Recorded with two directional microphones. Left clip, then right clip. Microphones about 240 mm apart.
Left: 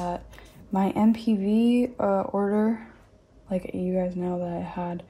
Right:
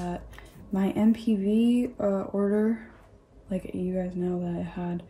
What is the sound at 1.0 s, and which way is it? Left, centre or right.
Speech, left.